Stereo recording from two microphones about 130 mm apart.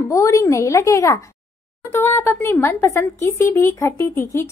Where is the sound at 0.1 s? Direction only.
25° left (ahead or behind).